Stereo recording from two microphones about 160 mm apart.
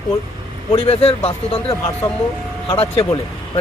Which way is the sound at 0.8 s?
40° left (ahead or behind).